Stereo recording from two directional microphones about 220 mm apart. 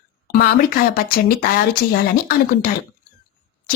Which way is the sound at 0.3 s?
40° left (ahead or behind).